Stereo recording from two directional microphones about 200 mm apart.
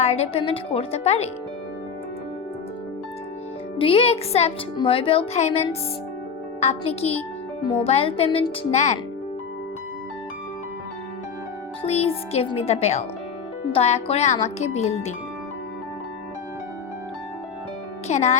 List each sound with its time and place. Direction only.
0.0 s a child's voice: 30° left (ahead or behind)
3.8 s a child's voice: 25° left (ahead or behind)
11.8 s a child's voice: 30° left (ahead or behind)
18.1 s a child's voice: 35° left (ahead or behind)